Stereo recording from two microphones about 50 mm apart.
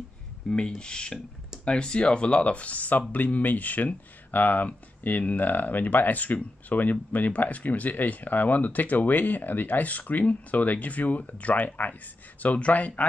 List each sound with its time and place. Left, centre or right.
0.5 s speech: centre